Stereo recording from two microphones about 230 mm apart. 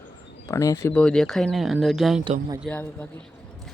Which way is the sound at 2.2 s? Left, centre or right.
Right.